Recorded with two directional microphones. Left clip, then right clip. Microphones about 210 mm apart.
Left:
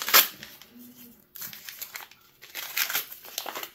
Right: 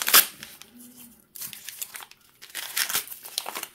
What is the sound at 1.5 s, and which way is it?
Crumpling, 10° right (ahead or behind).